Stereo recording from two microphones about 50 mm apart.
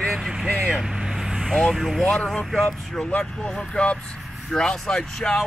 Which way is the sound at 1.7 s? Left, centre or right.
Centre.